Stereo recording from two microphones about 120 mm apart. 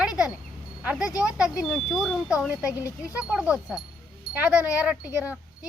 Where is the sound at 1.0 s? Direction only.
30° left (ahead or behind).